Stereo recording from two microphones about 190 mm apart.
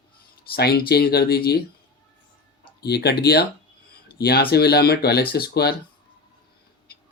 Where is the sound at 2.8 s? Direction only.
60° left (ahead or behind).